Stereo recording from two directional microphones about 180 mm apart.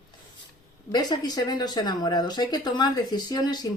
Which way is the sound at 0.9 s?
25° left (ahead or behind).